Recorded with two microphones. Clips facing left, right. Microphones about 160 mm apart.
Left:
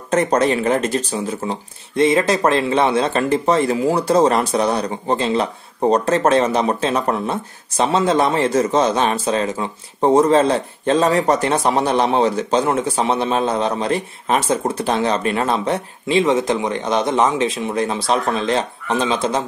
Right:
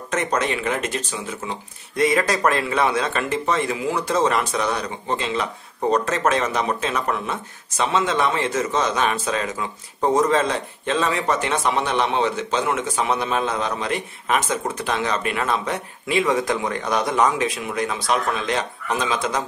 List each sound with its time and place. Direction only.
0.1 s speech: 35° left (ahead or behind)